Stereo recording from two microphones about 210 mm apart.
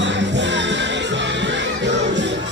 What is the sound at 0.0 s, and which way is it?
Music, 60° right (ahead or behind).